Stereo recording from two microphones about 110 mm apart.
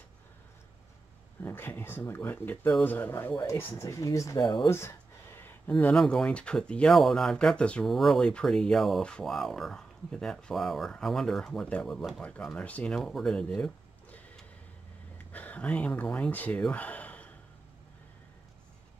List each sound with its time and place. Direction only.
1.4 s speech: 20° left (ahead or behind)
4.4 s speech: 45° left (ahead or behind)
4.6 s a sound: 25° left (ahead or behind)
5.7 s speech: 15° left (ahead or behind)
15.3 s speech: 15° left (ahead or behind)